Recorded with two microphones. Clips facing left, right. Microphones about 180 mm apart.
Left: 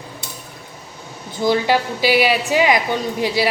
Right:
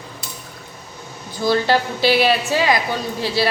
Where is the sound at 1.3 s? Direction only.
20° left (ahead or behind).